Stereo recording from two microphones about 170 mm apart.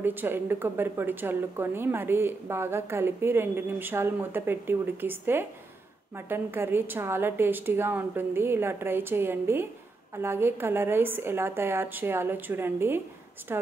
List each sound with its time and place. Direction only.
0.0 s speech: 10° right (ahead or behind)